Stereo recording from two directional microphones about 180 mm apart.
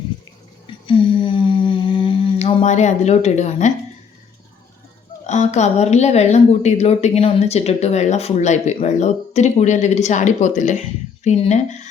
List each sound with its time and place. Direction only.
0.9 s humming: 30° left (ahead or behind)
5.2 s a woman's voice: 40° left (ahead or behind)